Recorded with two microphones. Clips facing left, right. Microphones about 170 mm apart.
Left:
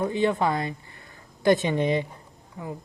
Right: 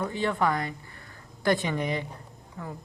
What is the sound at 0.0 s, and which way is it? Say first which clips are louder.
Speech: left 4 dB; 20° left (ahead or behind).